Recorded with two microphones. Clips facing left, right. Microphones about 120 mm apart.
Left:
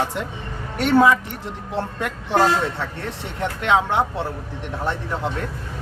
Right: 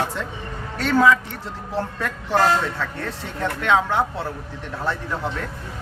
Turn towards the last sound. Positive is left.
turn(degrees=20)  # may be behind; listen again after turning